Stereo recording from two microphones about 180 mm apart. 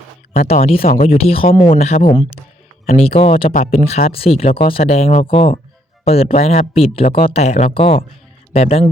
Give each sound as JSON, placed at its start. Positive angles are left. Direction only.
{"t": 0.3, "sound": "speech", "side_deg": 35}
{"t": 3.5, "sound": "speech", "side_deg": 45}